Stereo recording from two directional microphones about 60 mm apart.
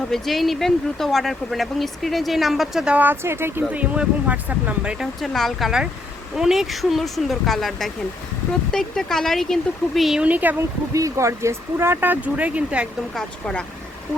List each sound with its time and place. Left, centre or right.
0.1 s speech: centre
3.2 s speech: right
3.7 s speech: right
5.2 s speech: centre
10.2 s speech: right
10.9 s speech: right
11.9 s speech: right
13.1 s speech: centre